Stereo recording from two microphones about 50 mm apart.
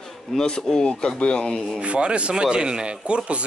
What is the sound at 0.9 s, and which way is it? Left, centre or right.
Speech, left.